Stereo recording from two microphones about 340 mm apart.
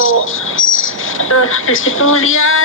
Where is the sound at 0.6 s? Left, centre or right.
Left.